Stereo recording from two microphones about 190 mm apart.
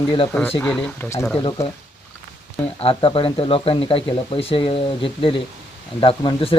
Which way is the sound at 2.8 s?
30° left (ahead or behind).